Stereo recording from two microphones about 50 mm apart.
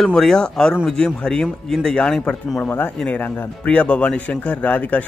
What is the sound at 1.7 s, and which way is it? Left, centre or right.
Speech, centre.